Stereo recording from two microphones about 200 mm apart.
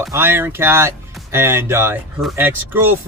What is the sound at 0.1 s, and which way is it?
Speech, 10° right (ahead or behind).